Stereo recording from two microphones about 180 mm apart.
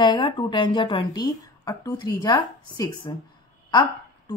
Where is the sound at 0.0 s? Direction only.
25° left (ahead or behind).